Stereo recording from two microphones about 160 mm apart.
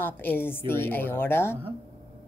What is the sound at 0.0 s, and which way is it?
Speech, 15° left (ahead or behind).